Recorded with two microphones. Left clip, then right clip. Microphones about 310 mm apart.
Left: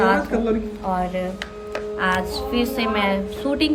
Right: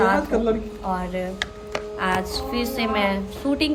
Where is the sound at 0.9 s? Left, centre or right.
Centre.